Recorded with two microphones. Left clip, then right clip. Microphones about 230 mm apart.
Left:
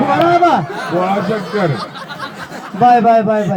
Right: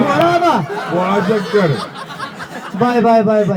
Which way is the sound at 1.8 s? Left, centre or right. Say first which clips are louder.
Even; centre.